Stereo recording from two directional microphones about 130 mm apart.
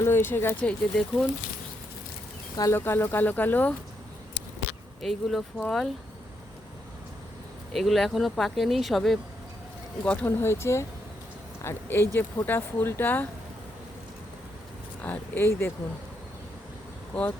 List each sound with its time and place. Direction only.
0.0 s speech: 15° left (ahead or behind)
2.6 s speech: 20° left (ahead or behind)
5.0 s speech: 5° left (ahead or behind)
7.7 s speech: centre (ahead or behind)
15.0 s speech: 15° left (ahead or behind)